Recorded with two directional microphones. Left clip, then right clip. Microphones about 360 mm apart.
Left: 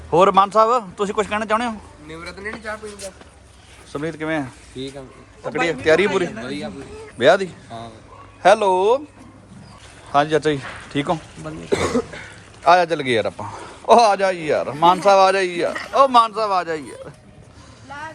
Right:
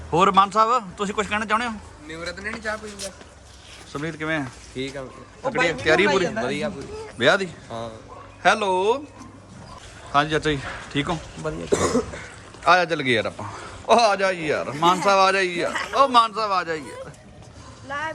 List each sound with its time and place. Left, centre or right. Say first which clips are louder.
0.1 s a man's voice: left 3 dB; centre
2.0 s speech: even; centre
3.9 s a man's voice: left 3 dB; centre
6.3 s a man's voice: right 4 dB; centre
7.2 s a man's voice: left 4 dB; centre
10.1 s a man's voice: left 4 dB; centre
12.6 s a man's voice: left 3 dB; centre